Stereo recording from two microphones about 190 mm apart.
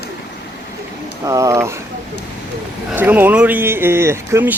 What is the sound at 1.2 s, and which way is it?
Speech, 15° right (ahead or behind).